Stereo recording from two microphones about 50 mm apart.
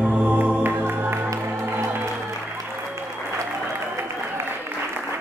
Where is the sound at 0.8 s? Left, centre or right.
Right.